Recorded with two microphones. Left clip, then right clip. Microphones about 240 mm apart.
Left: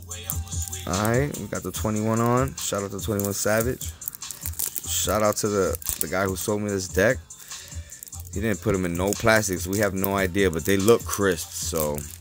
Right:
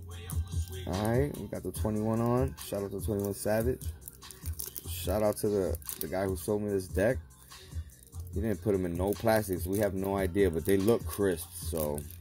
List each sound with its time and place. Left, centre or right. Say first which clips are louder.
0.8 s speech: left 7 dB; left
4.9 s speech: left 7 dB; left
8.4 s speech: left 6 dB; left